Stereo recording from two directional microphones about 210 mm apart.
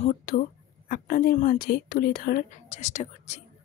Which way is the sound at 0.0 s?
40° left (ahead or behind).